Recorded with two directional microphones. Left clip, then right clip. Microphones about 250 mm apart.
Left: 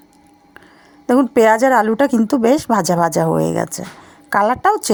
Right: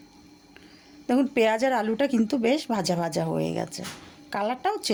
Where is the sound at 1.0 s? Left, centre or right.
Left.